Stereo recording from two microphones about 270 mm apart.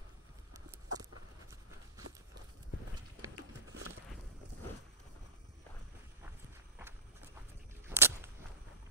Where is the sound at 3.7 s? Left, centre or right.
Right.